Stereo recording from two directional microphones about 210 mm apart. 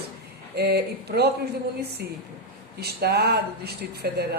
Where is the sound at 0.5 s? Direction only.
50° right (ahead or behind).